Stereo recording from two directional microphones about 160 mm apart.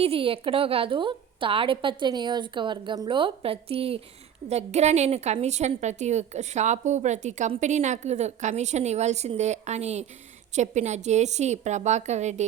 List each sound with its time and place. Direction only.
0.0 s a woman's voice: 35° right (ahead or behind)